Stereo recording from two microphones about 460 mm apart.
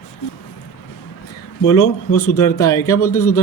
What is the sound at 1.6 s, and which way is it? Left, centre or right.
Speech, left.